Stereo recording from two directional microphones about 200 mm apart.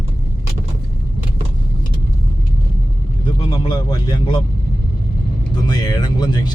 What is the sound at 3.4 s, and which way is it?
Music, 20° left (ahead or behind).